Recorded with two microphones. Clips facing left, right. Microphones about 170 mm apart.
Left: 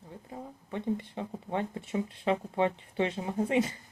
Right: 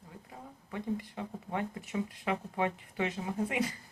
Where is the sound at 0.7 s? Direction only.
25° left (ahead or behind).